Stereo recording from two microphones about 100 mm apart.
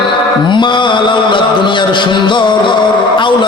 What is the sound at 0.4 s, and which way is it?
Music, 50° left (ahead or behind).